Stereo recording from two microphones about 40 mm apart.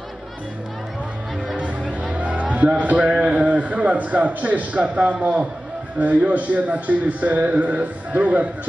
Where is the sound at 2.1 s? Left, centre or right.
Right.